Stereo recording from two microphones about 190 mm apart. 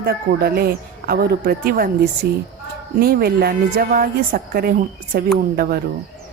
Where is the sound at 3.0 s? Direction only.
50° right (ahead or behind).